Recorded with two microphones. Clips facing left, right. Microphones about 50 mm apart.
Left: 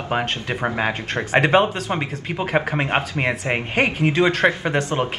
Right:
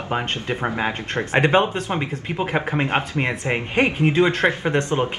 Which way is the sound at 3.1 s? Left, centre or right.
Centre.